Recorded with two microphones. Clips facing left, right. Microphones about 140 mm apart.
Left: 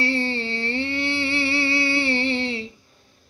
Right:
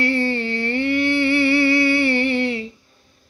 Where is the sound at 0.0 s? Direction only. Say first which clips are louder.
Right 4 dB; 25° left (ahead or behind).